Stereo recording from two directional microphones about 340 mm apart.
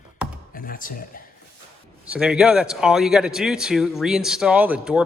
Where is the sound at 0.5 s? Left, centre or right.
Left.